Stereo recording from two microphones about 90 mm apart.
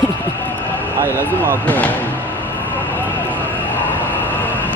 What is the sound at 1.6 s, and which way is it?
Speech, 15° left (ahead or behind).